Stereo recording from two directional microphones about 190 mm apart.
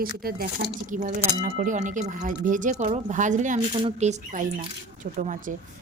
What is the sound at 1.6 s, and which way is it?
A woman's voice, 40° right (ahead or behind).